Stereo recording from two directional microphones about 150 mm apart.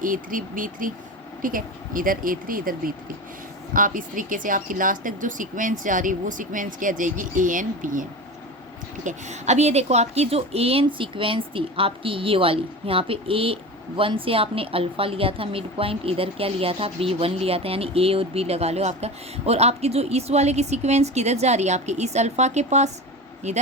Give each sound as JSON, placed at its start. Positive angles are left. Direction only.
{"t": 0.0, "sound": "speech", "side_deg": -65}
{"t": 9.0, "sound": "a woman's voice", "side_deg": -50}